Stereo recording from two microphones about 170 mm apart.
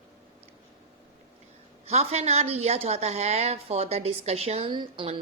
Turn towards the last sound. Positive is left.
turn(degrees=-30)  # may be behind; listen again after turning